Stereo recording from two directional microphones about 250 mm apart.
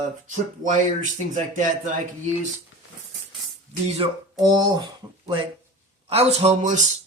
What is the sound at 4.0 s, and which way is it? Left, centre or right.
Speech, centre.